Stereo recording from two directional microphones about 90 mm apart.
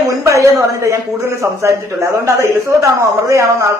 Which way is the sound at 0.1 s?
35° right (ahead or behind).